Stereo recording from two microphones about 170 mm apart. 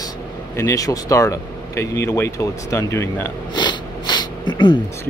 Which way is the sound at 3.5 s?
25° left (ahead or behind).